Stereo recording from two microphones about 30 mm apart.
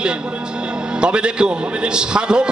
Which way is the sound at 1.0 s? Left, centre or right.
Right.